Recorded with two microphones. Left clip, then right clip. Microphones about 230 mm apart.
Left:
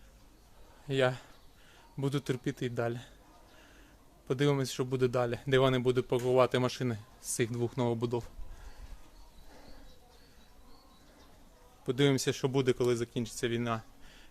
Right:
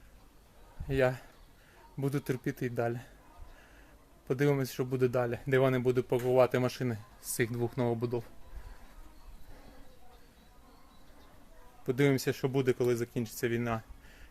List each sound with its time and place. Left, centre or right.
0.9 s a man's voice: centre
4.3 s speech: centre
7.9 s speech: centre
11.9 s speech: centre